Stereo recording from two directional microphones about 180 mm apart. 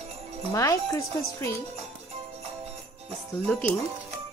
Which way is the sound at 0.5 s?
20° left (ahead or behind).